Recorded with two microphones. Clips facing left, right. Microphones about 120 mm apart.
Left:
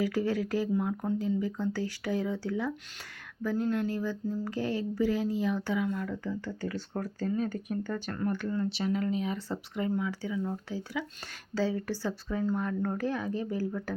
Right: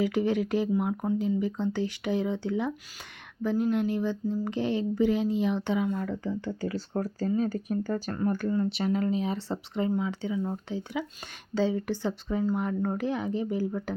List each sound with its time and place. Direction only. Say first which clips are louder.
0.0 s speech: right 3 dB; 20° right (ahead or behind)